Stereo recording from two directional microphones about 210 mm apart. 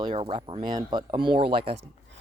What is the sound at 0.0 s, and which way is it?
Speech, 20° right (ahead or behind).